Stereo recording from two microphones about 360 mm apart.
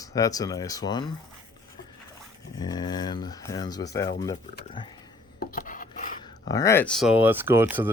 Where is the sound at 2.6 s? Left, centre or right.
Centre.